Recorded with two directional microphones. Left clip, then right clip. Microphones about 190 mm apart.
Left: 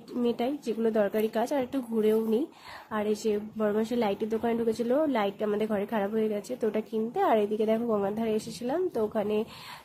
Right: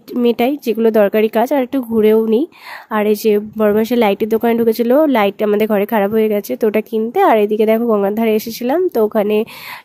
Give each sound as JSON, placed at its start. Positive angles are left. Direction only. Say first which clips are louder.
{"t": 0.2, "sound": "a woman's voice", "louder": "right 14 dB", "side_deg": -45}